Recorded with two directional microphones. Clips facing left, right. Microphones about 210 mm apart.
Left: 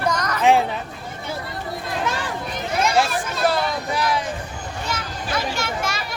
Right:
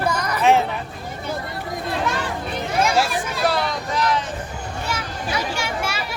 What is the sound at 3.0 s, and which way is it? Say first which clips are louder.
Hubbub: left 1 dB; centre (ahead or behind).